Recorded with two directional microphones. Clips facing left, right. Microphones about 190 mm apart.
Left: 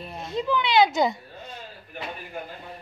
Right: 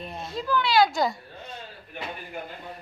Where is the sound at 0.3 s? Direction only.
20° left (ahead or behind).